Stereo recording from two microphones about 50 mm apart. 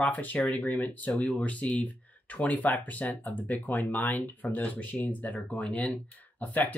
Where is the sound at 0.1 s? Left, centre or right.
Left.